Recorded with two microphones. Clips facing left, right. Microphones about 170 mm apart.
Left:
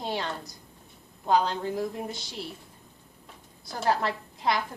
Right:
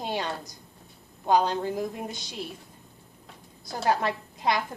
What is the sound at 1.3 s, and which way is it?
A woman's voice, 15° right (ahead or behind).